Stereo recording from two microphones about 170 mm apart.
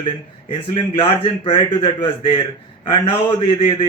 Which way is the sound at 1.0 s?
30° left (ahead or behind).